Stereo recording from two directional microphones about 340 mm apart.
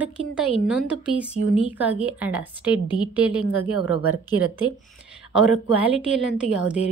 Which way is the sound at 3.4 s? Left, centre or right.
Left.